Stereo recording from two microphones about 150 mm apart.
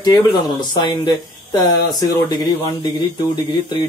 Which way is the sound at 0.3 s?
30° left (ahead or behind).